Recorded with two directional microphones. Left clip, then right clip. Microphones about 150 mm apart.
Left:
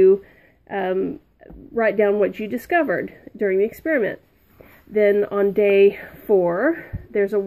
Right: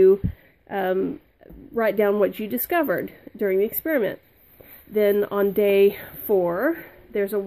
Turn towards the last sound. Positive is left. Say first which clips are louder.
# left 4 dB
turn(degrees=-5)  # may be behind; listen again after turning